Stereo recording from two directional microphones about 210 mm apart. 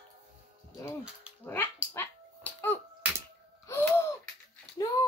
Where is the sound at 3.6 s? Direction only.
10° left (ahead or behind).